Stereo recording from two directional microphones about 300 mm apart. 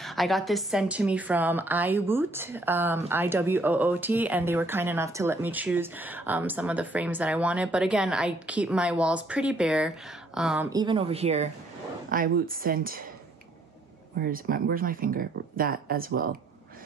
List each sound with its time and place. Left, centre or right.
0.0 s a woman's voice: centre; by 13.0 s right
14.2 s speech: right